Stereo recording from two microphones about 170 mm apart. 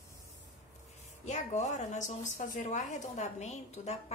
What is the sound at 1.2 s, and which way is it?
A woman's voice, 45° left (ahead or behind).